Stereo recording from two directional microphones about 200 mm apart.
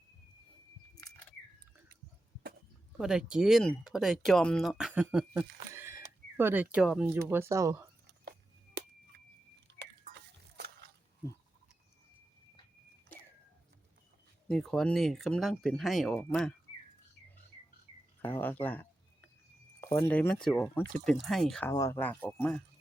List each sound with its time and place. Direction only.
0.9 s a sound: 15° left (ahead or behind)
3.0 s speech: 5° right (ahead or behind)
14.4 s speech: centre (ahead or behind)
18.2 s speech: 10° left (ahead or behind)
21.7 s speech: 15° left (ahead or behind)